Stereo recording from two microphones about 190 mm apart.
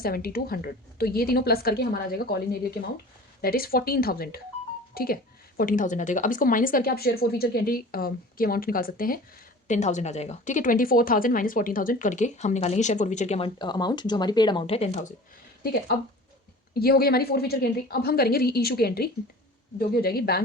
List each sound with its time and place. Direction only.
0.0 s a woman's voice: 55° left (ahead or behind)
9.6 s speech: 40° left (ahead or behind)
13.6 s speech: 20° left (ahead or behind)
15.6 s a woman's voice: 55° left (ahead or behind)